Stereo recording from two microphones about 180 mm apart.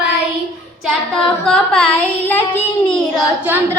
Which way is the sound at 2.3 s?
5° left (ahead or behind).